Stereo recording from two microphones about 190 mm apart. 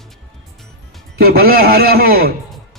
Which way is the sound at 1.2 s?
55° right (ahead or behind).